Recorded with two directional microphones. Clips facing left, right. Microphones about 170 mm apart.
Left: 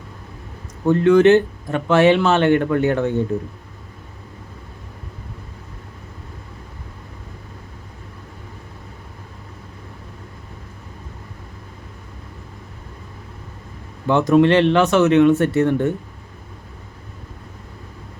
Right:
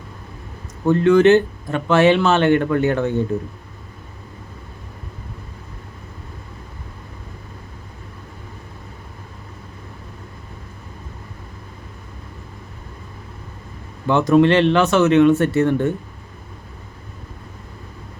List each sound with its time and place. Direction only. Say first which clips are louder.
0.9 s speech: even; 15° left (ahead or behind)
14.1 s speech: even; 15° left (ahead or behind)